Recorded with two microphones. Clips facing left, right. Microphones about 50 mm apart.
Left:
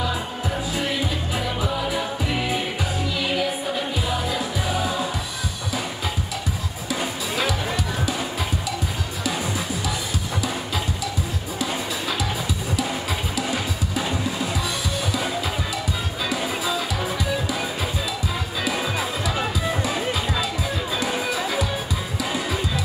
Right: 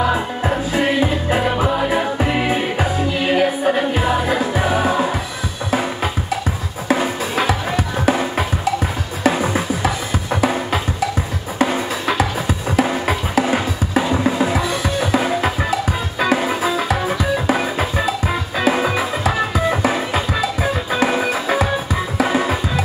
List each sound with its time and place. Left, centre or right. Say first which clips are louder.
0.0 s music: right 8 dB; right
6.9 s music: right 8 dB; right